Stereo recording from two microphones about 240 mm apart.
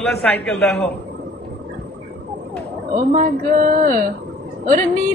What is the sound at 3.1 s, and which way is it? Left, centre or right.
A woman's voice, right.